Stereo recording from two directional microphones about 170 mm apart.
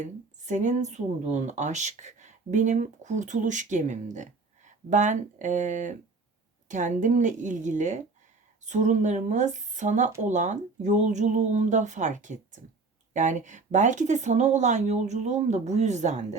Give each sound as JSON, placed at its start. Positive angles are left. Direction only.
{"t": 0.0, "sound": "speech", "side_deg": -45}